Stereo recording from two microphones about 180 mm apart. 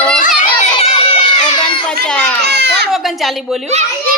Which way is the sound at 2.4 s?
65° right (ahead or behind).